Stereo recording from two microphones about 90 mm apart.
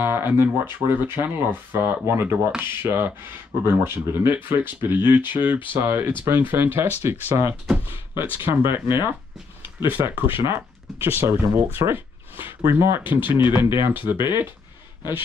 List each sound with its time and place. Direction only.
0.0 s speech: 25° right (ahead or behind)
9.8 s speech: 20° right (ahead or behind)
13.2 s speech: 60° left (ahead or behind)
13.6 s speech: 25° right (ahead or behind)